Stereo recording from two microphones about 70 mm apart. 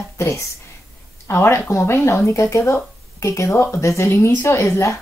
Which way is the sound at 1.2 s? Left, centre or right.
Left.